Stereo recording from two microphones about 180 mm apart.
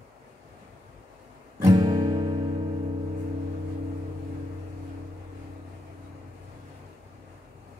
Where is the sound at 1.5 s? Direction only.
20° right (ahead or behind).